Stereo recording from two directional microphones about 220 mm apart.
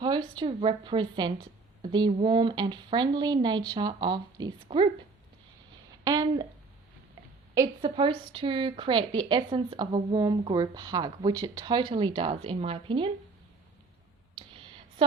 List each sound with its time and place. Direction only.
0.0 s speech: 20° right (ahead or behind)
6.1 s a woman's voice: 15° right (ahead or behind)
7.5 s speech: 15° right (ahead or behind)
14.3 s clicking: 25° right (ahead or behind)